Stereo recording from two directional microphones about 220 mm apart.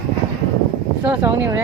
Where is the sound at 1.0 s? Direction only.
10° right (ahead or behind).